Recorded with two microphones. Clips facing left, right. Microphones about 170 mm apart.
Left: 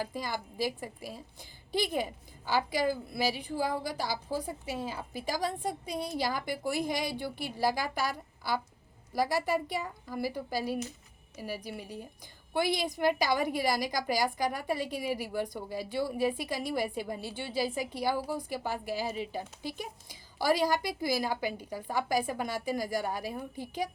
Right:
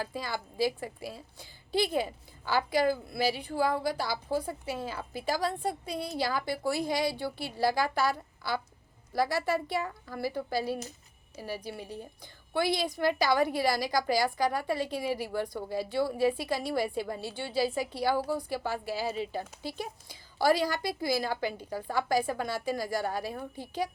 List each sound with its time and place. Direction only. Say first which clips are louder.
0.0 s a woman's voice: even; 15° left (ahead or behind)
1.7 s a woman's voice: right 2 dB; 15° left (ahead or behind)